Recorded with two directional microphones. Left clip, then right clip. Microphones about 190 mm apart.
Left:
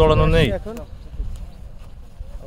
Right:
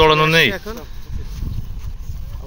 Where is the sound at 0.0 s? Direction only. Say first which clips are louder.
Right 4 dB; 10° left (ahead or behind).